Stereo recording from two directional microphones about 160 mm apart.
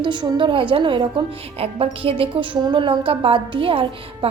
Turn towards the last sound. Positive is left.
turn(degrees=-35)  # may be behind; listen again after turning